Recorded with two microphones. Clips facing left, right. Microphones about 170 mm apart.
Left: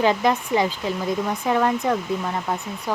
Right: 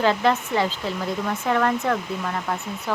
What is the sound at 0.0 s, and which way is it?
Speech, 15° left (ahead or behind).